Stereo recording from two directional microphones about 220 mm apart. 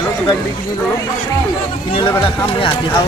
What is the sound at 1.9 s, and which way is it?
Speech, 20° left (ahead or behind).